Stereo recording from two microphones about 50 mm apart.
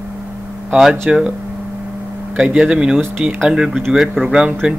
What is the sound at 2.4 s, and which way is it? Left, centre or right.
Speech, centre.